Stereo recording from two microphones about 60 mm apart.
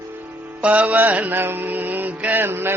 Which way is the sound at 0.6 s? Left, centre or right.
Right.